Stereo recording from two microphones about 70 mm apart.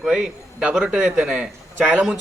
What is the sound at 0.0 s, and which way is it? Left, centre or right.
A man's voice, centre.